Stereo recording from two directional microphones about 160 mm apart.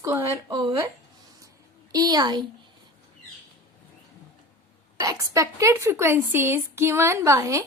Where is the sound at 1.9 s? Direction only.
25° right (ahead or behind).